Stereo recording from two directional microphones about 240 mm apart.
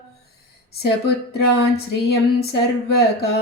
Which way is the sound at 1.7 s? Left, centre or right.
Left.